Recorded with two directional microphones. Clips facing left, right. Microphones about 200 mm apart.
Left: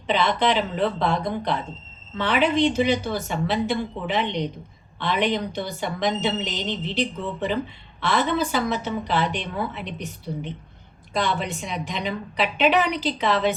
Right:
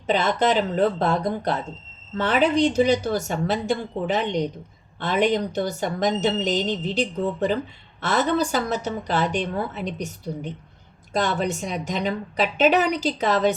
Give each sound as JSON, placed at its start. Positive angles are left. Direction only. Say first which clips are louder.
{"t": 0.1, "sound": "speech", "louder": "right 1 dB", "side_deg": -45}